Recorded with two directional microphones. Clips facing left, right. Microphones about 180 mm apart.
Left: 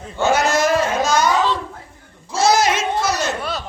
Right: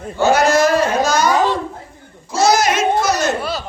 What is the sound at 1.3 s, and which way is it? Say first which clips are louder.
Babbling: right 3 dB; 50° right (ahead or behind).